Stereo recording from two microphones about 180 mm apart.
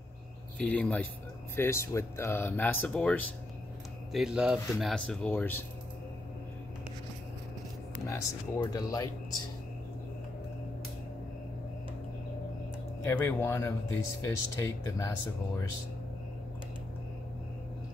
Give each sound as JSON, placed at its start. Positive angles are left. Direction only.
{"t": 0.6, "sound": "speech", "side_deg": 5}
{"t": 4.1, "sound": "speech", "side_deg": -5}
{"t": 8.1, "sound": "speech", "side_deg": 20}
{"t": 13.0, "sound": "speech", "side_deg": 15}